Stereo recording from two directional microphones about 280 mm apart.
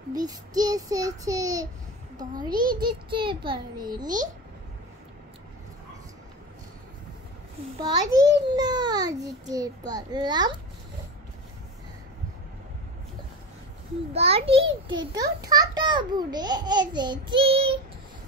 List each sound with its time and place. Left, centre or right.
0.1 s a child's voice: centre
7.8 s a child's voice: centre
14.1 s a child's voice: right